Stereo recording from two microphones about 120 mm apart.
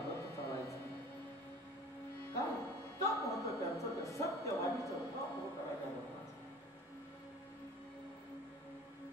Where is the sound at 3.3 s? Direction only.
25° left (ahead or behind).